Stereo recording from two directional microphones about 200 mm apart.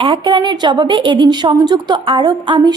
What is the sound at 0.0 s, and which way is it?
A woman's voice, 25° right (ahead or behind).